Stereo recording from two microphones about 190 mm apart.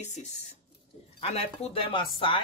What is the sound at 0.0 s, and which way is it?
Speech, 40° left (ahead or behind).